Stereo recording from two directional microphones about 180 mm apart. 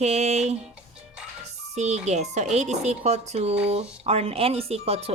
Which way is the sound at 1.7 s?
40° right (ahead or behind).